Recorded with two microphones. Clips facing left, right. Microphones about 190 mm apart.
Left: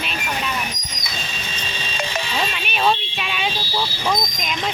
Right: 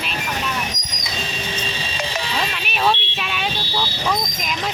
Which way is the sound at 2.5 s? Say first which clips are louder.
Even; centre (ahead or behind).